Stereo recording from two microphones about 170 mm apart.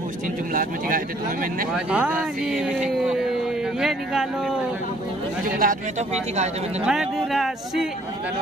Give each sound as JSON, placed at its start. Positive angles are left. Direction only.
{"t": 0.6, "sound": "speech", "side_deg": -55}
{"t": 1.7, "sound": "speech", "side_deg": -5}
{"t": 5.4, "sound": "speech", "side_deg": -55}
{"t": 6.8, "sound": "speech", "side_deg": -5}